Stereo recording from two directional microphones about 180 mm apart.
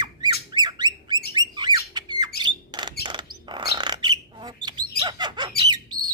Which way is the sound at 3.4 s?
25° right (ahead or behind).